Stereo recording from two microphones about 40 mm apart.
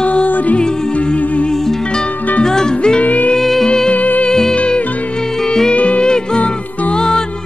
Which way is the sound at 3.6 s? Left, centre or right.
Left.